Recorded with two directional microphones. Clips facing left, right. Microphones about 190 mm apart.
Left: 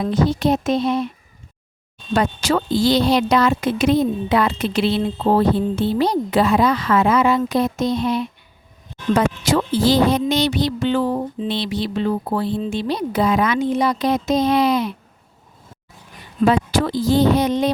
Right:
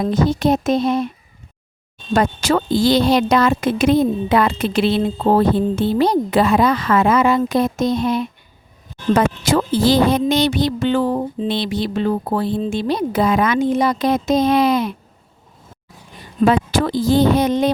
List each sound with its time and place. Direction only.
0.0 s speech: 45° right (ahead or behind)
2.1 s speech: 50° right (ahead or behind)
16.5 s speech: 50° right (ahead or behind)